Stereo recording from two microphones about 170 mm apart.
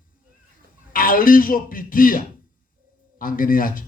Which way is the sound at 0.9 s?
55° left (ahead or behind).